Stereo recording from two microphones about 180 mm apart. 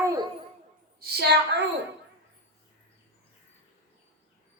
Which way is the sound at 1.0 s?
65° right (ahead or behind).